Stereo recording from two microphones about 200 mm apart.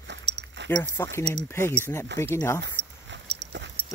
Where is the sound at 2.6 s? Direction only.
60° right (ahead or behind).